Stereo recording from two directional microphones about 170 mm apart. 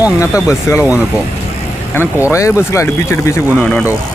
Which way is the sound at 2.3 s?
15° left (ahead or behind).